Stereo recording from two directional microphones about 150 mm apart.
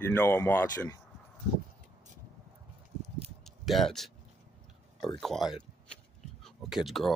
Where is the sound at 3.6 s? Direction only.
Centre (ahead or behind).